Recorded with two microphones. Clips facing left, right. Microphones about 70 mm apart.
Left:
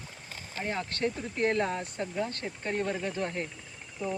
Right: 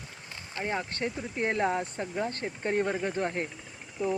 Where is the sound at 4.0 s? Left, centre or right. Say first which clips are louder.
Right 4 dB; centre.